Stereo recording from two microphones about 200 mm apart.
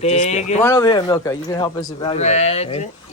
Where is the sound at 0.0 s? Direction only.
35° left (ahead or behind).